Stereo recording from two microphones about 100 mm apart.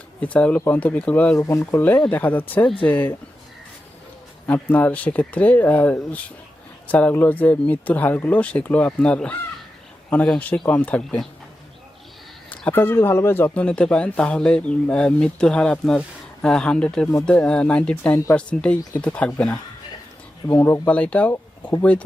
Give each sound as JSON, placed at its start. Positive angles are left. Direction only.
{"t": 0.2, "sound": "speech", "side_deg": 15}
{"t": 1.4, "sound": "speech", "side_deg": 25}
{"t": 4.4, "sound": "speech", "side_deg": 15}
{"t": 12.5, "sound": "speech", "side_deg": 20}
{"t": 13.5, "sound": "speech", "side_deg": 10}
{"t": 20.6, "sound": "speech", "side_deg": 20}